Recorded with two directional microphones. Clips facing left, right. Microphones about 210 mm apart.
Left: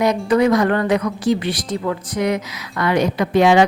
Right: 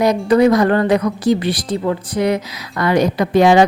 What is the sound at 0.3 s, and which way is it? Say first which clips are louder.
Speech: right 4 dB; 35° right (ahead or behind).